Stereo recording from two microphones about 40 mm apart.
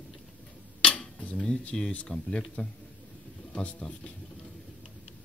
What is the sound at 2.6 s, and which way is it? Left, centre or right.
Speech, left.